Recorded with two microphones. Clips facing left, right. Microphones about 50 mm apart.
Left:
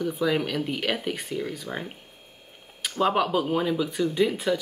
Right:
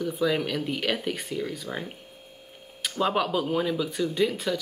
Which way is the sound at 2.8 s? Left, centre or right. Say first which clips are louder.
Left 2 dB; centre.